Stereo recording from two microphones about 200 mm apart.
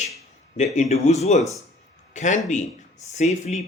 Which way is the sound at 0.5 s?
35° left (ahead or behind).